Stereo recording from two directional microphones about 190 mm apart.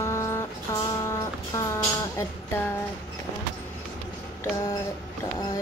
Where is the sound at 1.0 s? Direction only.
15° left (ahead or behind).